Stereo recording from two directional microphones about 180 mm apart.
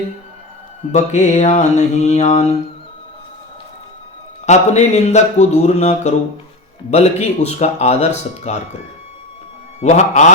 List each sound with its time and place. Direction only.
0.9 s speech: 40° left (ahead or behind)
4.4 s speech: 40° left (ahead or behind)
9.8 s speech: 40° left (ahead or behind)